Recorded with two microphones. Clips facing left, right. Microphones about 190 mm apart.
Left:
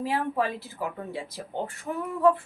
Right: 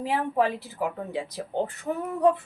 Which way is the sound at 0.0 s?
15° right (ahead or behind).